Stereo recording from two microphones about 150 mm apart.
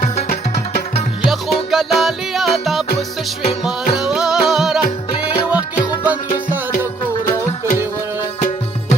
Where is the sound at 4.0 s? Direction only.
5° right (ahead or behind).